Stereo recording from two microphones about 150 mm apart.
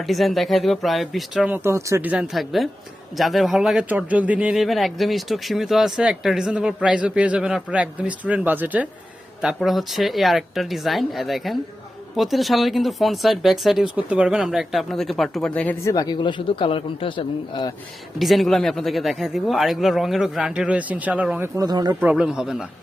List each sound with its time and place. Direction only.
0.1 s speech: centre (ahead or behind)
15.8 s a man's voice: 25° left (ahead or behind)
18.2 s speech: centre (ahead or behind); by 21.9 s 25° right (ahead or behind)
22.0 s speech: 5° right (ahead or behind)